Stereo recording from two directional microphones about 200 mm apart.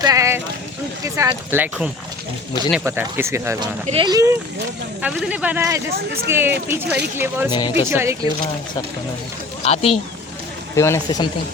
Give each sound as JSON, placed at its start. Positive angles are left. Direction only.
{"t": 0.0, "sound": "speech", "side_deg": -15}
{"t": 3.8, "sound": "speech", "side_deg": -25}
{"t": 5.0, "sound": "speech", "side_deg": -5}
{"t": 6.8, "sound": "speech", "side_deg": -55}
{"t": 7.2, "sound": "speech", "side_deg": -10}
{"t": 7.5, "sound": "speech", "side_deg": 25}
{"t": 7.9, "sound": "speech", "side_deg": -10}
{"t": 9.6, "sound": "speech", "side_deg": 30}
{"t": 10.8, "sound": "speech", "side_deg": 15}